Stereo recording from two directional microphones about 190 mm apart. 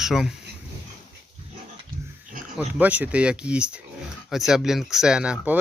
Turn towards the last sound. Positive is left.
turn(degrees=-5)  # may be behind; listen again after turning